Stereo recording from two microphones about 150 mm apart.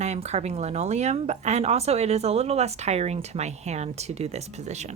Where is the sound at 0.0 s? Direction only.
45° right (ahead or behind).